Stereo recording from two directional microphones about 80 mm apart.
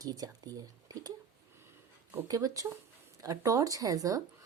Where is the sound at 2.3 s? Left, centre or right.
Right.